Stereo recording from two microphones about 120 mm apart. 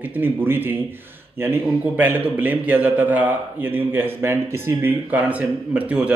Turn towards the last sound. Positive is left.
turn(degrees=-10)  # may be behind; listen again after turning